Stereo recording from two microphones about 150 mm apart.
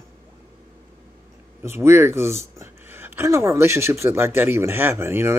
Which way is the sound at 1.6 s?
15° right (ahead or behind).